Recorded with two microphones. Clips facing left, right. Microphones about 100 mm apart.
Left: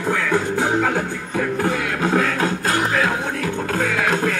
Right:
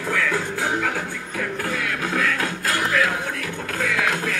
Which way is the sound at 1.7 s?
30° left (ahead or behind).